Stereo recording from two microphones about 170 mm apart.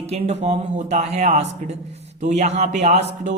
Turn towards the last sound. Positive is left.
turn(degrees=-40)  # may be behind; listen again after turning